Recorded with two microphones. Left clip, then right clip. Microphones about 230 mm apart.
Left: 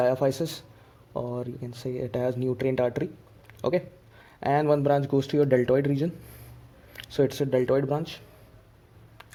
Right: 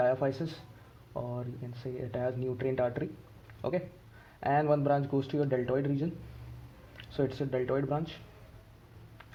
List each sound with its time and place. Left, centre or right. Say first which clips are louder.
0.0 s speech: left 5 dB; left